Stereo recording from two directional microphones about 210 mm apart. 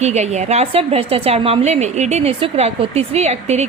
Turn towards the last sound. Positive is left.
turn(degrees=-30)  # may be behind; listen again after turning